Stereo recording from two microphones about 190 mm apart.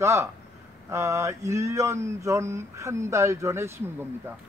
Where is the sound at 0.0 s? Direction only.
15° right (ahead or behind).